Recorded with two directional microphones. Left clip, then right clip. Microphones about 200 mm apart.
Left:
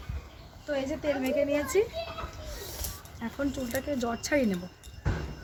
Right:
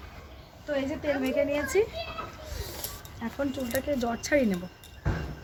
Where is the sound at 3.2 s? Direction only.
Centre (ahead or behind).